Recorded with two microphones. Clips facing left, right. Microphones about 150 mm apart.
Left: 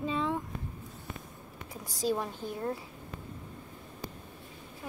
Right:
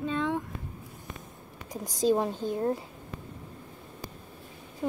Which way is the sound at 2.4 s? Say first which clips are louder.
Right 6 dB; 15° right (ahead or behind).